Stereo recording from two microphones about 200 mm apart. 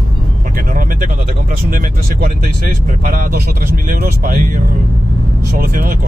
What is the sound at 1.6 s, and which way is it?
Speech, 45° right (ahead or behind).